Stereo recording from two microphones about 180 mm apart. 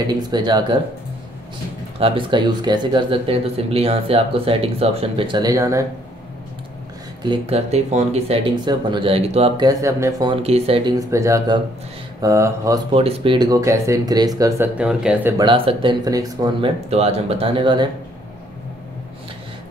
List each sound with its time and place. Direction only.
0.0 s speech: 25° right (ahead or behind)
2.0 s speech: 30° right (ahead or behind)
7.2 s speech: 35° right (ahead or behind)
9.7 s speech: 15° right (ahead or behind)
10.4 s speech: 35° right (ahead or behind)
11.0 s speech: 15° right (ahead or behind)
12.9 s speech: 30° right (ahead or behind)
14.8 s speech: 5° right (ahead or behind)
15.3 s speech: 30° right (ahead or behind)
16.9 s speech: 35° right (ahead or behind)